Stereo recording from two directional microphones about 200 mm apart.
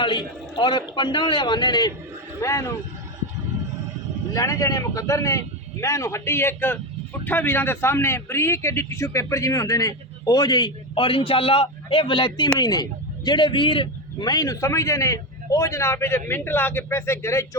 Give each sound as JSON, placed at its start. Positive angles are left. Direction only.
{"t": 0.0, "sound": "a man's voice", "side_deg": 25}
{"t": 4.4, "sound": "a man's voice", "side_deg": 15}